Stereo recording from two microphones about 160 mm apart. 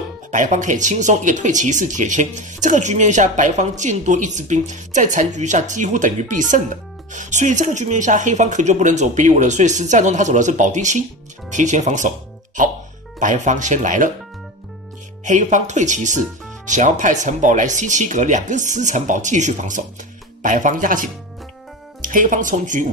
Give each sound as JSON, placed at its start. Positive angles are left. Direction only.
{"t": 0.3, "sound": "speech", "side_deg": -50}
{"t": 15.2, "sound": "speech", "side_deg": -50}